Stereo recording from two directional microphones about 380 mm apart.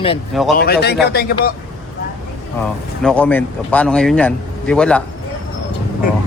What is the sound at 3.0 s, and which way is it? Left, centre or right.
A man's voice, centre.